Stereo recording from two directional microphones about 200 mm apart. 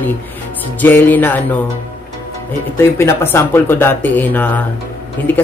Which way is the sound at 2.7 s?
15° left (ahead or behind).